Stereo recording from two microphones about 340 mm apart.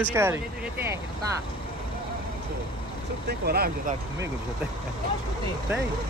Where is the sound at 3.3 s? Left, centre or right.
Right.